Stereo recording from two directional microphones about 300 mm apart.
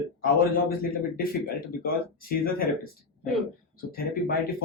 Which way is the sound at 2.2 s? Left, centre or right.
Left.